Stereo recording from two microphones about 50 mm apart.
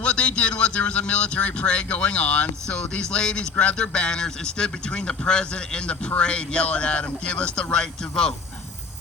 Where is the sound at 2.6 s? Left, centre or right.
Centre.